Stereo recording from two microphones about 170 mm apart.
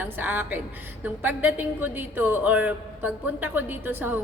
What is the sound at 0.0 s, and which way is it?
A woman's voice, 10° right (ahead or behind).